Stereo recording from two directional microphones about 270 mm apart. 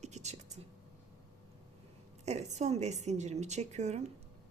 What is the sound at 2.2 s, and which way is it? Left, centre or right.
Speech, right.